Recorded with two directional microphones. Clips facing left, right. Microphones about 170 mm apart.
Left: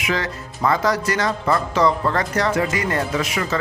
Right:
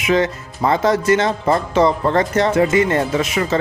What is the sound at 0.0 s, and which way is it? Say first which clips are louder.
Speech: right 7 dB; 20° right (ahead or behind).